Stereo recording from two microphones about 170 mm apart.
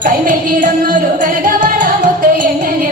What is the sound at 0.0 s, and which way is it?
Music, 50° right (ahead or behind).